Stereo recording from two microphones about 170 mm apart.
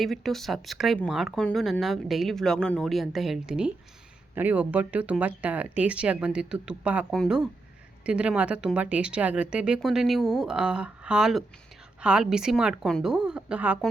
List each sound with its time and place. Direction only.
0.0 s speech: centre (ahead or behind)